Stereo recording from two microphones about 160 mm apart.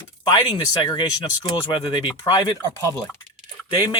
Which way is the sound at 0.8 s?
25° left (ahead or behind).